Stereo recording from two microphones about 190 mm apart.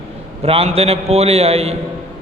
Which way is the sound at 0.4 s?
30° right (ahead or behind).